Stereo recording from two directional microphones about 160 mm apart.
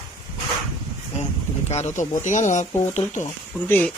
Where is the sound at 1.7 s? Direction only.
45° left (ahead or behind).